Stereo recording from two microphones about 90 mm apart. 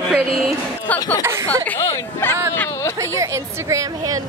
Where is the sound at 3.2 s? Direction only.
35° right (ahead or behind).